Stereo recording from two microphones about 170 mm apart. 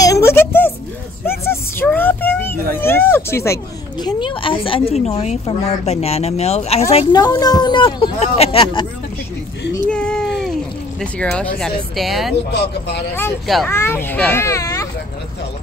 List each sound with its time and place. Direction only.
0.0 s a sound: 20° left (ahead or behind)
4.0 s speech: 30° left (ahead or behind)
7.2 s speech: 25° left (ahead or behind)
9.8 s a sound: 5° left (ahead or behind)
11.0 s speech: 5° left (ahead or behind)
13.7 s a child's voice: 15° left (ahead or behind)